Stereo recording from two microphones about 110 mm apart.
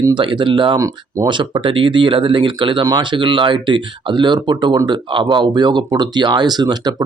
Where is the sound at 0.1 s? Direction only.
50° right (ahead or behind).